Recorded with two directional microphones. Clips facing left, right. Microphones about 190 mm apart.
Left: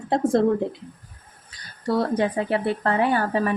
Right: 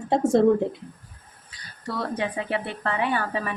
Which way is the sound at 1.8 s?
40° left (ahead or behind).